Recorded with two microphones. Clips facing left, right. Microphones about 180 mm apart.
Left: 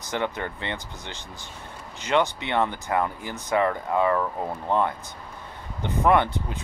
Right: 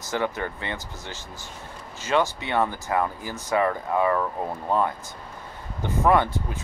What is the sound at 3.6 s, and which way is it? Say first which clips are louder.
Speech: even; 20° right (ahead or behind).